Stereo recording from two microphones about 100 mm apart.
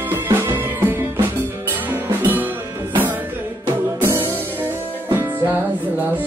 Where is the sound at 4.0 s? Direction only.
20° right (ahead or behind).